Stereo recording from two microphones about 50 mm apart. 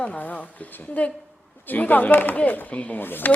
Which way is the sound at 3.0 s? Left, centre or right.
Left.